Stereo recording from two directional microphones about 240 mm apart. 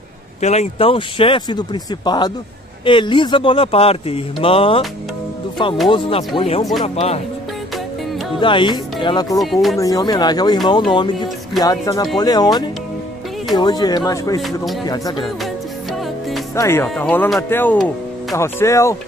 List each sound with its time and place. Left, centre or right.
0.4 s speech: left
5.9 s speech: left
8.4 s speech: centre
9.4 s speech: centre
9.8 s speech: centre
14.4 s speech: centre
14.9 s speech: centre
16.5 s speech: centre